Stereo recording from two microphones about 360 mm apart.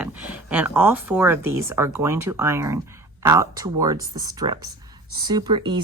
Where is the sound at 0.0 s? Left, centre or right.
Centre.